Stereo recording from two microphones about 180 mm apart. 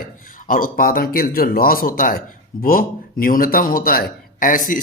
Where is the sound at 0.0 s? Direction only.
50° left (ahead or behind).